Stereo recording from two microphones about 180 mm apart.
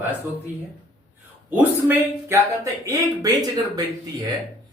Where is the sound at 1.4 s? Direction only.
10° right (ahead or behind).